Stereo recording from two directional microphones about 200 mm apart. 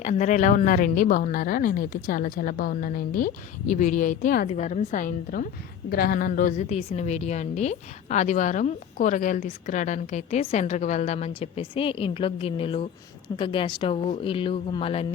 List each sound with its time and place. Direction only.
0.0 s a woman's voice: 35° left (ahead or behind)